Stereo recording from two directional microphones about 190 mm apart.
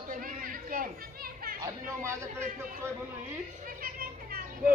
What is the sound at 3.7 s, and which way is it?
Children playing, 50° right (ahead or behind).